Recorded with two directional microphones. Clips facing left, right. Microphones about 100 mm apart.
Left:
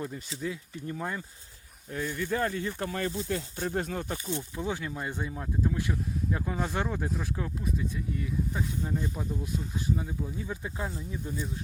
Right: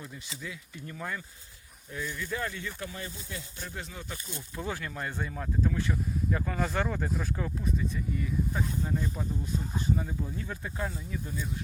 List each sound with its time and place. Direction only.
0.0 s speech: 40° left (ahead or behind)
1.9 s speech: 50° left (ahead or behind)
4.3 s speech: 20° left (ahead or behind); by 10.4 s 5° left (ahead or behind)
10.4 s speech: 15° left (ahead or behind)